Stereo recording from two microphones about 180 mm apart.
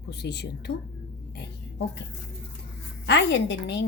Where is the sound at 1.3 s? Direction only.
65° left (ahead or behind).